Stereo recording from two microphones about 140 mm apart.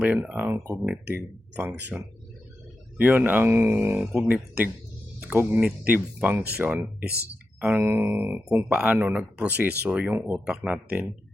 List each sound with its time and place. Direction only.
0.0 s speech: 10° right (ahead or behind)